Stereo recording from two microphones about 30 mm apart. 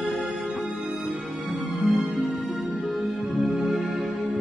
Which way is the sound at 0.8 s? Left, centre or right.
Right.